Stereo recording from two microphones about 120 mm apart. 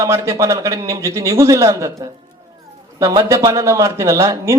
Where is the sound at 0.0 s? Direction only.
25° right (ahead or behind).